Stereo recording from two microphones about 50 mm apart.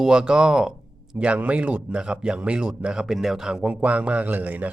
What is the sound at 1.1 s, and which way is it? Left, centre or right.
Speech, right.